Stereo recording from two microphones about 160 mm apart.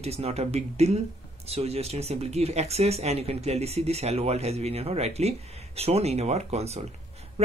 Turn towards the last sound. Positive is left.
turn(degrees=-40)  # may be behind; listen again after turning